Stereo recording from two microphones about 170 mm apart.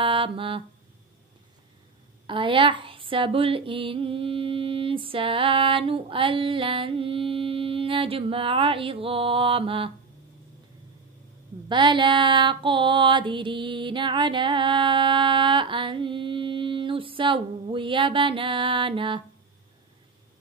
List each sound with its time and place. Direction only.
0.0 s mantra: 30° right (ahead or behind)
2.2 s speech: 30° right (ahead or behind)
11.7 s female singing: 30° right (ahead or behind)